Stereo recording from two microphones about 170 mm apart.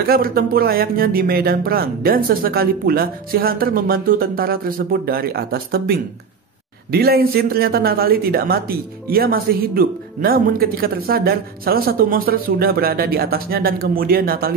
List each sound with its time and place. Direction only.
0.0 s a man's voice: 60° right (ahead or behind)